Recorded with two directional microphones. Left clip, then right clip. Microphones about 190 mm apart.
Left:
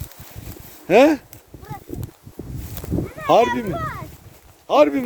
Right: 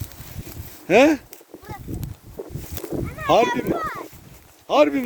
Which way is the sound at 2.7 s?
5° left (ahead or behind).